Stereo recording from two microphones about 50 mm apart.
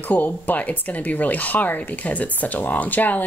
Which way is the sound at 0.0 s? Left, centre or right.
Left.